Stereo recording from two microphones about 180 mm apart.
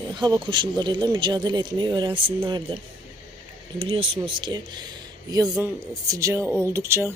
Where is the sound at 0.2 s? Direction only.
25° right (ahead or behind).